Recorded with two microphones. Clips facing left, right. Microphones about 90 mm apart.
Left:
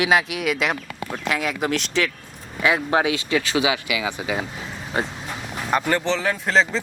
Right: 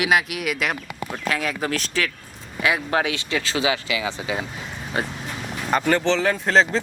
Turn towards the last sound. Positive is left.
turn(degrees=0)  # may be behind; listen again after turning